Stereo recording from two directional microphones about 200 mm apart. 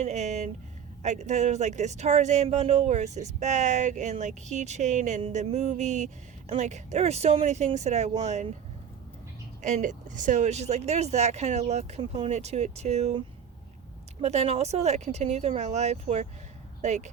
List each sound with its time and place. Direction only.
0.0 s speech: 35° right (ahead or behind)
9.6 s speech: 35° right (ahead or behind)